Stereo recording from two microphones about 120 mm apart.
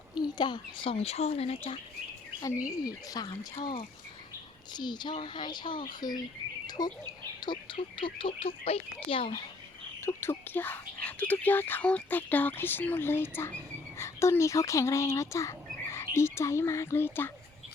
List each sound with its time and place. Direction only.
0.2 s speech: 40° left (ahead or behind)
2.6 s speech: 30° left (ahead or behind); by 9.4 s 50° left (ahead or behind)
10.0 s speech: 20° left (ahead or behind)